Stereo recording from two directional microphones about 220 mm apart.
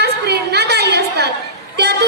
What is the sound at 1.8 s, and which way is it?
Music, 50° right (ahead or behind).